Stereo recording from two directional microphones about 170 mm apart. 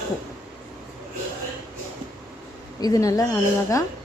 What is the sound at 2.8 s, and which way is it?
Speech, 20° left (ahead or behind).